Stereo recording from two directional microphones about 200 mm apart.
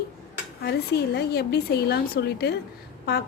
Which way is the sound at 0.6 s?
55° left (ahead or behind).